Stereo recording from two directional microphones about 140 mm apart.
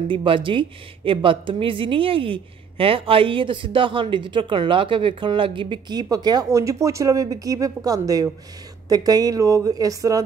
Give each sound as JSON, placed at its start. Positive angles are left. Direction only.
{"t": 0.1, "sound": "a woman's voice", "side_deg": -40}